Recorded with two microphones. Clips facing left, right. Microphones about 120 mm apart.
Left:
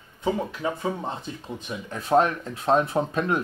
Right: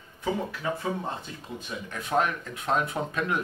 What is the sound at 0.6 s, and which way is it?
Speech, 20° left (ahead or behind).